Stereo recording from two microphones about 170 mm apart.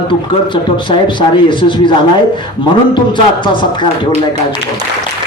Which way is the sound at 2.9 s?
30° left (ahead or behind).